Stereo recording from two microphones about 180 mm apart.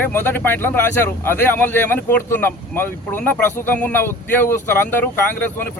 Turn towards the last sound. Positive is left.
turn(degrees=10)  # may be behind; listen again after turning